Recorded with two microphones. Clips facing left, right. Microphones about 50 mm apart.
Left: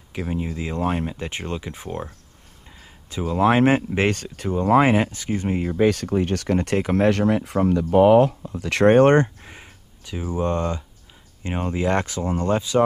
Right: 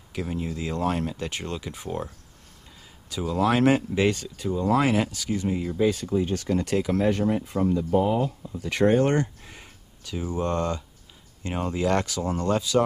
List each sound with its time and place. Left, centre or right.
0.1 s speech: left
7.1 s speech: left
9.4 s speech: left